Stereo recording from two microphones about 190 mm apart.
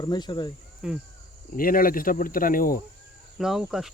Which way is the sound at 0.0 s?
20° left (ahead or behind).